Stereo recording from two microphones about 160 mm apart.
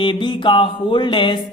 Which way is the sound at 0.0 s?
30° left (ahead or behind).